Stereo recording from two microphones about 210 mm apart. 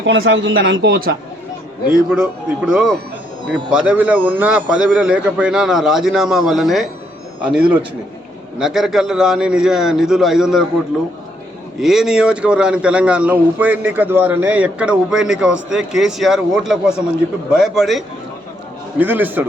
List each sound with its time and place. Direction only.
0.0 s a man's voice: 60° right (ahead or behind); by 1.1 s 45° right (ahead or behind)
1.9 s a man's voice: 5° right (ahead or behind)
11.8 s a man's voice: centre (ahead or behind)